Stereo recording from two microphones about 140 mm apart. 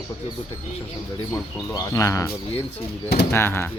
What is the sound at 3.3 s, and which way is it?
Speech, 15° left (ahead or behind).